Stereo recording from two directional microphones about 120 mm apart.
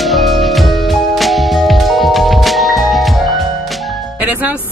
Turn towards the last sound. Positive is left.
turn(degrees=-10)  # may be behind; listen again after turning